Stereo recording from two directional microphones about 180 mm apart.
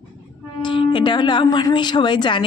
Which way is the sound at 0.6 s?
25° left (ahead or behind).